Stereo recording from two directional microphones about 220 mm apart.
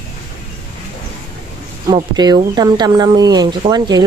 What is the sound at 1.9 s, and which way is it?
Speech, 20° right (ahead or behind).